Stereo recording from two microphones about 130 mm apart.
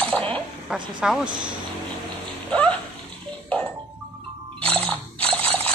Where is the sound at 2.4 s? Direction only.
10° left (ahead or behind).